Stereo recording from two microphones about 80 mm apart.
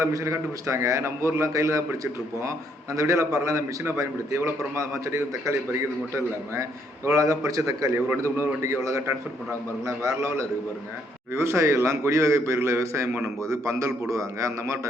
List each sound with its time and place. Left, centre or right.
0.0 s a man's voice: right
2.9 s a man's voice: right
7.9 s a man's voice: right